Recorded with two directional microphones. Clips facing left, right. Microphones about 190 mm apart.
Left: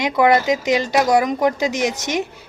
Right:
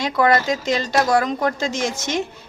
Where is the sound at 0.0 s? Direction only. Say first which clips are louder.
Left 2 dB; 15° left (ahead or behind).